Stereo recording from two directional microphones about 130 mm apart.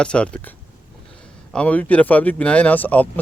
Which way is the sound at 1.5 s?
10° left (ahead or behind).